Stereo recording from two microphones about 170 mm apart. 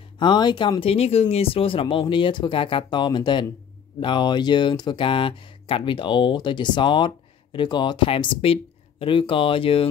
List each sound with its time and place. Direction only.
0.2 s speech: 25° left (ahead or behind)